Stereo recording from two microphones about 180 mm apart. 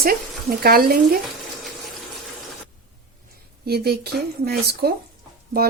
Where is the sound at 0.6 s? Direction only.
55° right (ahead or behind).